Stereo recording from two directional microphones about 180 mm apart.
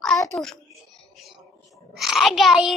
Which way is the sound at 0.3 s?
Centre (ahead or behind).